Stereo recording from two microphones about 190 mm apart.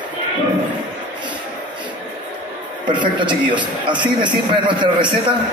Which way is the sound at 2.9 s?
25° right (ahead or behind).